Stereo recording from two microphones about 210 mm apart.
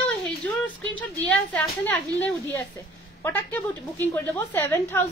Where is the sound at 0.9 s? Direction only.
5° left (ahead or behind).